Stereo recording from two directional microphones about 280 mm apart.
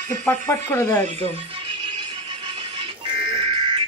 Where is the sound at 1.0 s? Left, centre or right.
Right.